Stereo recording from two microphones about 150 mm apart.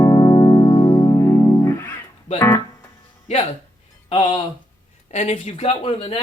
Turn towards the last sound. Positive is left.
turn(degrees=40)  # may be behind; listen again after turning